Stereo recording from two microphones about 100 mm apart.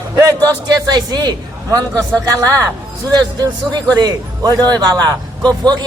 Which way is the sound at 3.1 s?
45° right (ahead or behind).